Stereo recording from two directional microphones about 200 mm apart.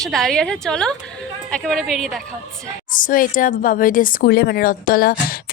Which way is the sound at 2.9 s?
40° left (ahead or behind).